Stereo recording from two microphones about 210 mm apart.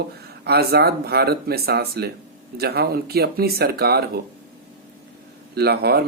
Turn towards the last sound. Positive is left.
turn(degrees=-50)  # may be behind; listen again after turning